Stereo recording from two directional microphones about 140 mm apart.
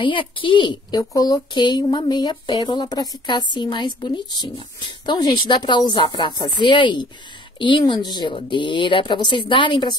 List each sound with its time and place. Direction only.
0.0 s speech: 40° left (ahead or behind)